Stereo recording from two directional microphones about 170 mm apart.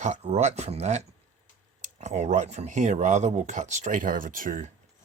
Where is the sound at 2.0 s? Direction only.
40° right (ahead or behind).